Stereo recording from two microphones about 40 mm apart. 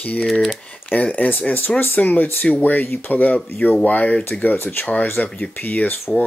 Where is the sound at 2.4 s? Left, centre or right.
Left.